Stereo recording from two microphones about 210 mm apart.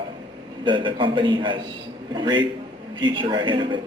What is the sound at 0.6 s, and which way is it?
A man's voice, 25° right (ahead or behind).